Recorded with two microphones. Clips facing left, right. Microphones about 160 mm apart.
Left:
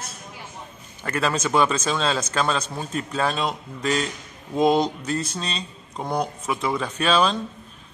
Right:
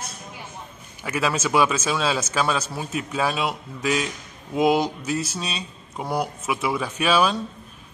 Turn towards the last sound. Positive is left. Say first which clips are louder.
# even
turn(degrees=-10)  # may be behind; listen again after turning